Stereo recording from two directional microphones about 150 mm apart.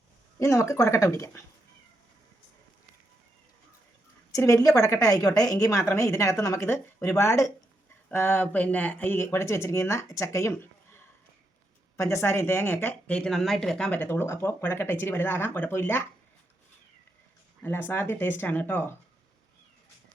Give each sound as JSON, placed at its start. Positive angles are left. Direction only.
{"t": 0.3, "sound": "a woman's voice", "side_deg": 20}
{"t": 4.3, "sound": "a woman's voice", "side_deg": 20}
{"t": 17.6, "sound": "speech", "side_deg": 10}